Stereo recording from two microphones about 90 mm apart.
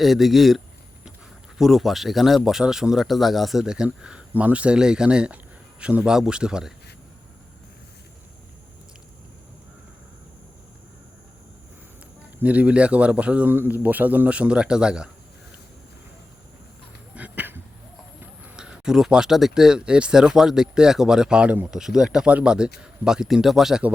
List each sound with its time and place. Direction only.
0.0 s a man's voice: centre (ahead or behind)
12.4 s a man's voice: 15° right (ahead or behind)
17.2 s a sound: 15° right (ahead or behind)
18.2 s a man's voice: 10° right (ahead or behind)